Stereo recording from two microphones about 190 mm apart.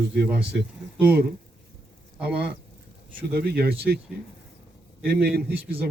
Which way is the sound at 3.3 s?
55° right (ahead or behind).